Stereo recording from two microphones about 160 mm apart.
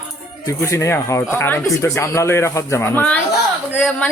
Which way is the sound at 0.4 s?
15° left (ahead or behind).